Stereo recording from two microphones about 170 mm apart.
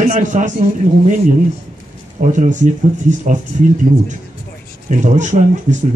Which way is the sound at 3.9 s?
40° right (ahead or behind).